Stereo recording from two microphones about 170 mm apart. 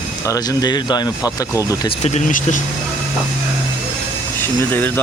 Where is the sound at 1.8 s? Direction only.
40° left (ahead or behind).